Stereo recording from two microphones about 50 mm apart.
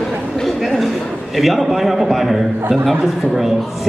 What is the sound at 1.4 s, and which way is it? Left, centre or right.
A man's voice, centre.